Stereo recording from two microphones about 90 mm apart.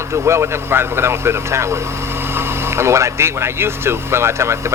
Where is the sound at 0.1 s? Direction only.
30° right (ahead or behind).